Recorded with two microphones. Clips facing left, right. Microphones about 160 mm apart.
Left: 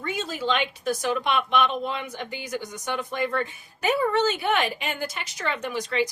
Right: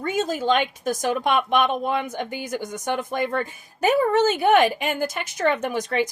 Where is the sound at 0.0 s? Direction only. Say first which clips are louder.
Right 6 dB; 45° right (ahead or behind).